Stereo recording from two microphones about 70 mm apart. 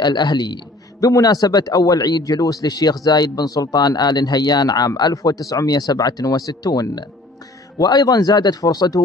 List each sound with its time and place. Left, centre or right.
0.0 s a man's voice: left
1.0 s speech: left